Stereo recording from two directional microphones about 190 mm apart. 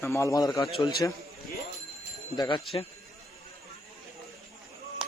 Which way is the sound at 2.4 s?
25° left (ahead or behind).